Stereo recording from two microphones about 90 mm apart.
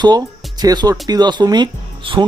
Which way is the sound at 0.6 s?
45° right (ahead or behind).